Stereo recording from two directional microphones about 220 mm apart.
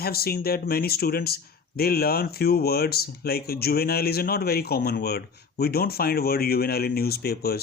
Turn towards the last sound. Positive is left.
turn(degrees=45)  # may be behind; listen again after turning